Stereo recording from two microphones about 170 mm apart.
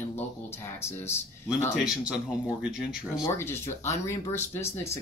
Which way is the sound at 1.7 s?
5° right (ahead or behind).